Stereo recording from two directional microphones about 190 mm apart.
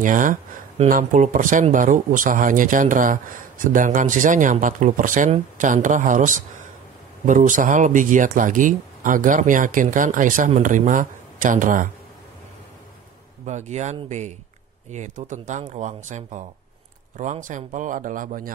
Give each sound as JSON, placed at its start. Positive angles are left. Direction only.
{"t": 0.0, "sound": "speech", "side_deg": -45}
{"t": 13.5, "sound": "speech", "side_deg": -35}